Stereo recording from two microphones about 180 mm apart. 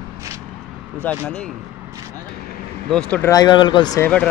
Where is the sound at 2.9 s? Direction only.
5° left (ahead or behind).